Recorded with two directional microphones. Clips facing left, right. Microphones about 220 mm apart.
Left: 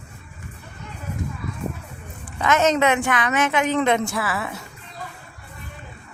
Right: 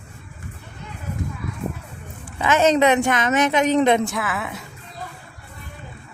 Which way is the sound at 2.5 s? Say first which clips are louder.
Right 2 dB; 30° right (ahead or behind).